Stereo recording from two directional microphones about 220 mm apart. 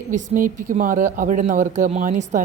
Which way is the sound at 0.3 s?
35° right (ahead or behind).